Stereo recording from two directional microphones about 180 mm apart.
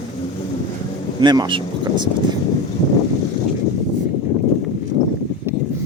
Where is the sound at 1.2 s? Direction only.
25° right (ahead or behind).